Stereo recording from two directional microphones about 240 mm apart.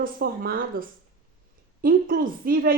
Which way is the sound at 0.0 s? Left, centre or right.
Right.